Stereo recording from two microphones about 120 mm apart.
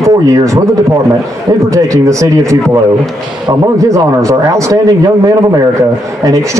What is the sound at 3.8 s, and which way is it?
Speech, 25° right (ahead or behind).